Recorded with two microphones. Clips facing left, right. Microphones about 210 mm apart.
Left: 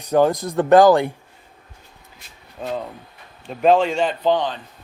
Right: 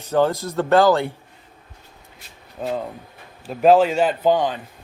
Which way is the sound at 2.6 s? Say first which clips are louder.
Right 2 dB; 5° right (ahead or behind).